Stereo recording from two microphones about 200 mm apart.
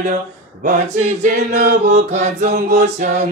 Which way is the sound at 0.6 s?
40° right (ahead or behind).